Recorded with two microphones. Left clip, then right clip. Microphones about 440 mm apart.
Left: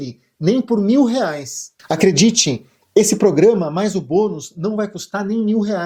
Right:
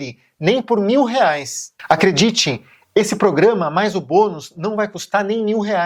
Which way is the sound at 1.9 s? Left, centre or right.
Right.